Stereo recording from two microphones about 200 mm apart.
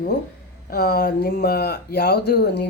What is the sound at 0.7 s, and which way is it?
Speech, 50° left (ahead or behind).